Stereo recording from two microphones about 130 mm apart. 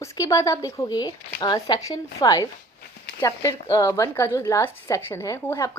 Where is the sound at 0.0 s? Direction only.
25° left (ahead or behind).